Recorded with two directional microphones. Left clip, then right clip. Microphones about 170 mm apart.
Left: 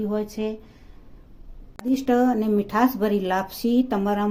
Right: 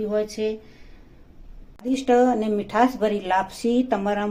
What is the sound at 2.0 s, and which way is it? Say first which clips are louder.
A woman's voice: right 3 dB; 65° left (ahead or behind).